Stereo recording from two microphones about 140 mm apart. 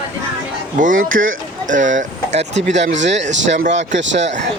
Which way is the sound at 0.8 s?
70° right (ahead or behind).